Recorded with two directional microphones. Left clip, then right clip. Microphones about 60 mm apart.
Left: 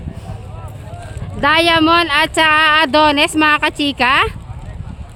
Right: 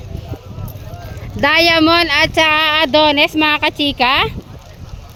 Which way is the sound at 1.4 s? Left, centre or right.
Centre.